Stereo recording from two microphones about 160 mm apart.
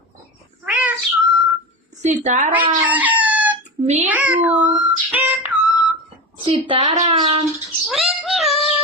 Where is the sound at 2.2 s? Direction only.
50° right (ahead or behind).